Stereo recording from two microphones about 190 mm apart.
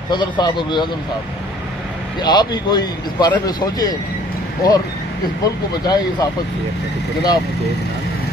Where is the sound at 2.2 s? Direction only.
20° left (ahead or behind).